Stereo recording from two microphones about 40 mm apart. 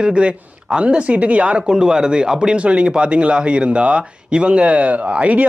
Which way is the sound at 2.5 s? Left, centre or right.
Right.